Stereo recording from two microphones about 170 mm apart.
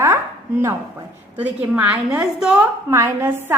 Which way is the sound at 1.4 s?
10° right (ahead or behind).